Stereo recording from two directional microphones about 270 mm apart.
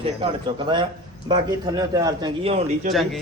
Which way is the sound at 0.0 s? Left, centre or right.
Centre.